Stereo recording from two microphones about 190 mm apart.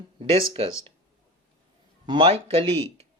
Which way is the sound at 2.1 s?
30° right (ahead or behind).